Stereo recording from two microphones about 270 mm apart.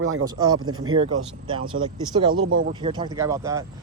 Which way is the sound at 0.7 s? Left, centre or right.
Right.